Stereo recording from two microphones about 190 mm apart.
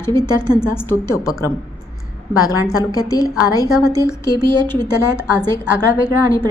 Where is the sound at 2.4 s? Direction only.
20° left (ahead or behind).